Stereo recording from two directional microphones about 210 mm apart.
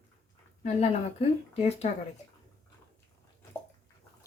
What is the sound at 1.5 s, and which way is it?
Speech, 30° left (ahead or behind).